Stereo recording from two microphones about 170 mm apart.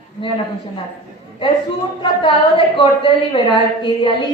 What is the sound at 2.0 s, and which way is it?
A woman's voice, 30° left (ahead or behind).